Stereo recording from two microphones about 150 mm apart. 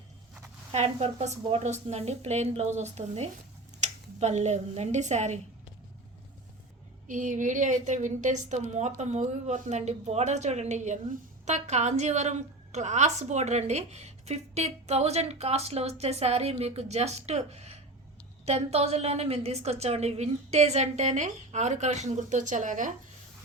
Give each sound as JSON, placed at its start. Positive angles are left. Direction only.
{"t": 0.7, "sound": "a woman's voice", "side_deg": -45}
{"t": 7.1, "sound": "a woman's voice", "side_deg": -60}